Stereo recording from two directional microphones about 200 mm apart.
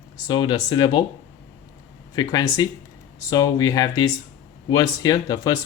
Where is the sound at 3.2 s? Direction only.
15° left (ahead or behind).